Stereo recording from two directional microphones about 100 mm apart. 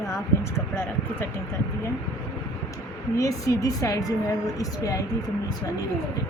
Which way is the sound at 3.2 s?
35° left (ahead or behind).